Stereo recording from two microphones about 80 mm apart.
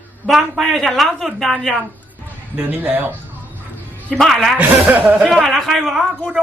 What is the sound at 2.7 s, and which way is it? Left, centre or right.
Speech, right.